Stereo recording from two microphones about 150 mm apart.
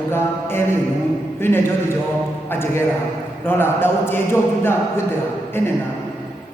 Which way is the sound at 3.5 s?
15° left (ahead or behind).